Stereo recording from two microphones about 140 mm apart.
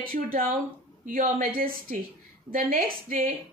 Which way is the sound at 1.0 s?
75° right (ahead or behind).